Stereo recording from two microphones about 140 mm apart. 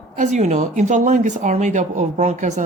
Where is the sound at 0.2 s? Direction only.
55° right (ahead or behind).